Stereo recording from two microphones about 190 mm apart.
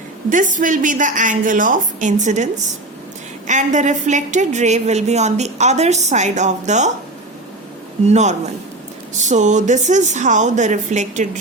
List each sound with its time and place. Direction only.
0.3 s a woman's voice: 45° right (ahead or behind)
8.0 s a woman's voice: 35° right (ahead or behind)